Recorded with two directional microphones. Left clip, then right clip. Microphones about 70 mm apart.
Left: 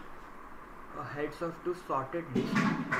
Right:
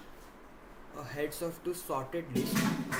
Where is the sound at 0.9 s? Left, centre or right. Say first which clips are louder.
Even; centre.